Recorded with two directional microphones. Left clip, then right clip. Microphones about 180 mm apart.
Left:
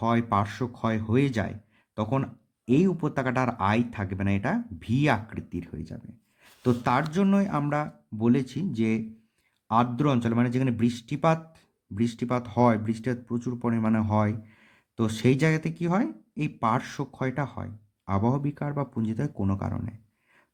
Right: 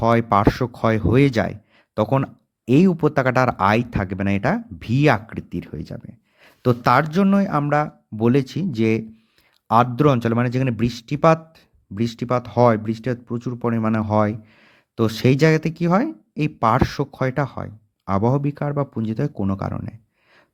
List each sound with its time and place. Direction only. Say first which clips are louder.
0.0 s speech: right 9 dB; 35° right (ahead or behind)